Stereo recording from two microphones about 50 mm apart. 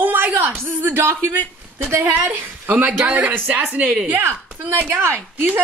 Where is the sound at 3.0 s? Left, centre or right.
Right.